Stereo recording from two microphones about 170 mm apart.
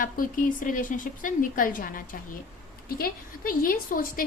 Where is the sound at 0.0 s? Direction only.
55° left (ahead or behind).